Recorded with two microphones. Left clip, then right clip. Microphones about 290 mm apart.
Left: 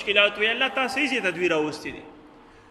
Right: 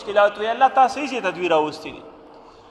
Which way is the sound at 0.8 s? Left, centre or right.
Centre.